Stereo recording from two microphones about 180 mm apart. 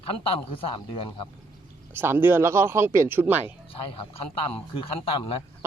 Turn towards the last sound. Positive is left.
turn(degrees=30)  # may be behind; listen again after turning